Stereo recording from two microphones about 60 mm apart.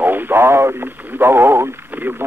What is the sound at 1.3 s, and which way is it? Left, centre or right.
Speech, right.